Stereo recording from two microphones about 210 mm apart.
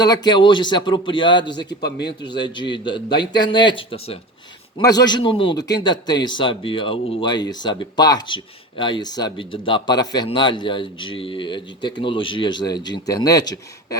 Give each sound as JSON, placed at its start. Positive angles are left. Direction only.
{"t": 0.0, "sound": "a man's voice", "side_deg": 20}
{"t": 1.8, "sound": "a man's voice", "side_deg": 50}
{"t": 2.2, "sound": "a man's voice", "side_deg": 20}